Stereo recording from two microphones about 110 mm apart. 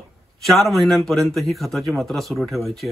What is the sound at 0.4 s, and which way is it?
A man's voice, centre (ahead or behind).